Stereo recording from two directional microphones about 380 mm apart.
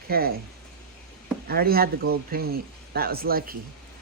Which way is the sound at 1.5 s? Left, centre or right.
Right.